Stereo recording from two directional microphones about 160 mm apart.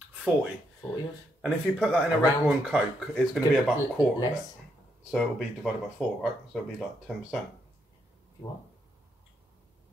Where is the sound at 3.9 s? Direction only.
25° left (ahead or behind).